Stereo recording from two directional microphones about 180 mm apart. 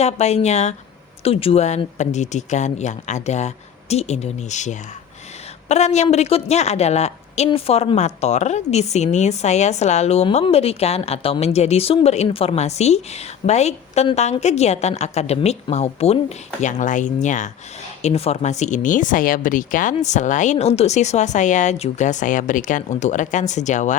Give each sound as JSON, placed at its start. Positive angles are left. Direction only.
{"t": 0.0, "sound": "a woman's voice", "side_deg": 35}